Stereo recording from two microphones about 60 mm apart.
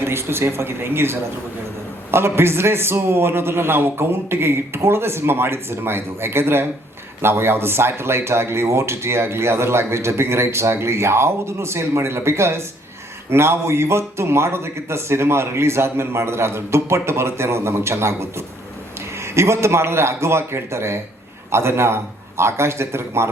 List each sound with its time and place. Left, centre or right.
0.0 s speech: right